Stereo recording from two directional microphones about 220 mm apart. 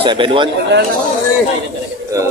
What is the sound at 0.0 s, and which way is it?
Speech, 25° right (ahead or behind).